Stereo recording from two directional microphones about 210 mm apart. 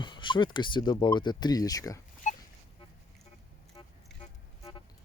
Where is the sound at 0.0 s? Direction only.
20° left (ahead or behind).